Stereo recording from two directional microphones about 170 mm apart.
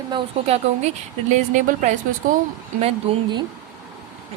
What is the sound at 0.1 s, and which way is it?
A woman's voice, 35° right (ahead or behind).